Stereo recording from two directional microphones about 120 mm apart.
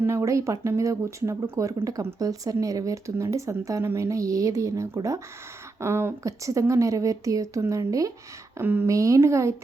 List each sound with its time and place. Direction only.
0.0 s speech: 25° right (ahead or behind)
8.5 s speech: 20° right (ahead or behind)